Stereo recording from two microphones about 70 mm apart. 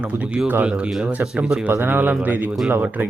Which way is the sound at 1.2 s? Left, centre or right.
Centre.